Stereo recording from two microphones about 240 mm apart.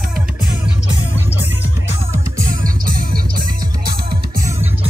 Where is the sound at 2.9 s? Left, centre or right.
Right.